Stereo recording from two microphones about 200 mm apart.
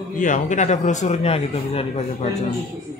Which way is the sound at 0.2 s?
40° left (ahead or behind).